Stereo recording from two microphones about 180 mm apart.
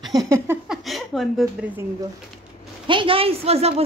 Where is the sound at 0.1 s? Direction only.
20° right (ahead or behind).